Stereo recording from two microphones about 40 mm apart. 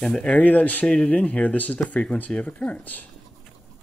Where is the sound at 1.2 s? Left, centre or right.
Left.